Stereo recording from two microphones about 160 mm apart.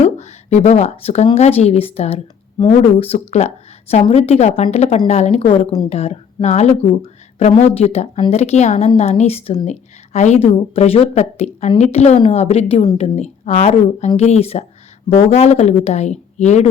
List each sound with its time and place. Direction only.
0.0 s speech: 45° left (ahead or behind)